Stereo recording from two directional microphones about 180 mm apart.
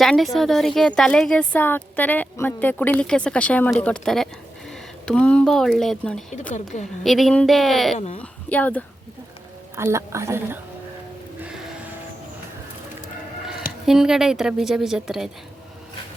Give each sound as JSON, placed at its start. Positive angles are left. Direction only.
{"t": 0.0, "sound": "a woman's voice", "side_deg": 0}
{"t": 7.9, "sound": "a woman's voice", "side_deg": 40}
{"t": 8.2, "sound": "speech", "side_deg": 10}
{"t": 9.7, "sound": "a woman's voice", "side_deg": -15}
{"t": 13.8, "sound": "a woman's voice", "side_deg": -5}